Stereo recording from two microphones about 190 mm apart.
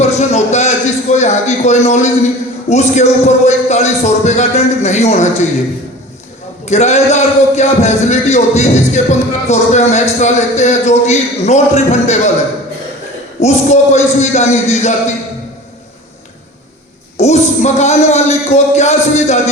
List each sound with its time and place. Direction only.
0.0 s a man's voice: 35° left (ahead or behind)
6.7 s a man's voice: 35° left (ahead or behind)
13.4 s a man's voice: 35° left (ahead or behind)
17.2 s a man's voice: 35° left (ahead or behind)